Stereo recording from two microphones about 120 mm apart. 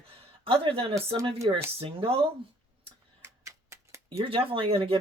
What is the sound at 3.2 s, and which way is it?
Typewriter, 25° right (ahead or behind).